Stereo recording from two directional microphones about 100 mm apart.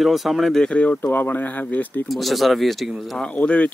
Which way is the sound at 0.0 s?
Centre (ahead or behind).